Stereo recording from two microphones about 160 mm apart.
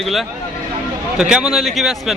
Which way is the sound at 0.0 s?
Centre (ahead or behind).